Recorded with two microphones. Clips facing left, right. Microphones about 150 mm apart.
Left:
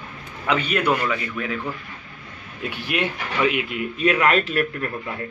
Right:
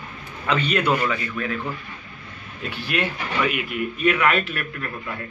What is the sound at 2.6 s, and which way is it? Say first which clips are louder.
Speech: left 1 dB; 15° left (ahead or behind).